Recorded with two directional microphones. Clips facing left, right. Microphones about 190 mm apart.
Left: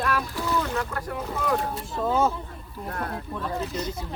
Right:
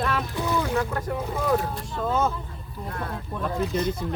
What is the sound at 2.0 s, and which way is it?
Speech, 5° left (ahead or behind).